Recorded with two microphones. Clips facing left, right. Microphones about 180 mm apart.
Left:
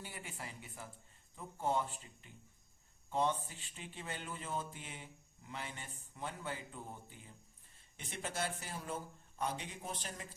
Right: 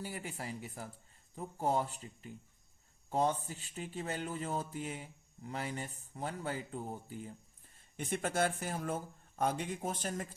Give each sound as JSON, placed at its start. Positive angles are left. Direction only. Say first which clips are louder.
{"t": 0.0, "sound": "speech", "louder": "right 6 dB", "side_deg": -40}
{"t": 7.9, "sound": "speech", "louder": "right 8 dB", "side_deg": -50}